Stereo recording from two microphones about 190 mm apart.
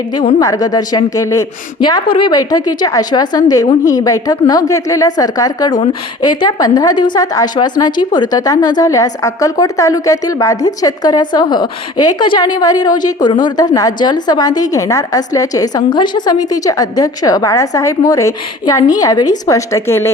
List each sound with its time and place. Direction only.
0.3 s a woman's voice: 20° left (ahead or behind)